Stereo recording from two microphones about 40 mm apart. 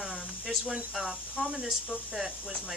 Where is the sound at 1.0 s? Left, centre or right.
Centre.